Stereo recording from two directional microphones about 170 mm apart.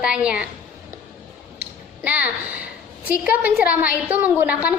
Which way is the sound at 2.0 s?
10° right (ahead or behind).